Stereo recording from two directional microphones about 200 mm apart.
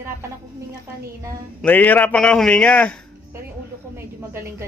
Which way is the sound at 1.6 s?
5° left (ahead or behind).